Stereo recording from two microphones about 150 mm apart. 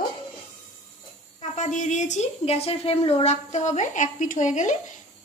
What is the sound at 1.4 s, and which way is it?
A woman's voice, 55° left (ahead or behind).